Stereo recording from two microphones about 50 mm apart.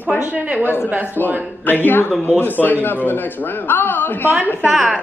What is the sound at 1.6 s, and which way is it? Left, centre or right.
A man's voice, left.